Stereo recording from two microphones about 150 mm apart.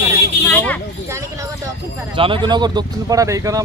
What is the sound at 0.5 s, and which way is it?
Speech, 10° left (ahead or behind).